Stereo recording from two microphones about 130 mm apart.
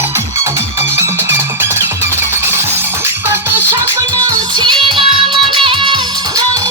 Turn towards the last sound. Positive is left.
turn(degrees=-25)  # may be behind; listen again after turning